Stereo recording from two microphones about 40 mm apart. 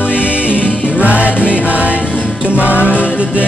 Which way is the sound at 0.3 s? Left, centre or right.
Right.